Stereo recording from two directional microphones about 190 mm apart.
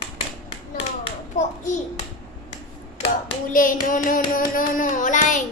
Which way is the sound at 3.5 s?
45° left (ahead or behind).